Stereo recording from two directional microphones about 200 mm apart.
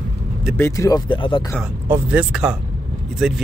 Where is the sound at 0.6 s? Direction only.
15° left (ahead or behind).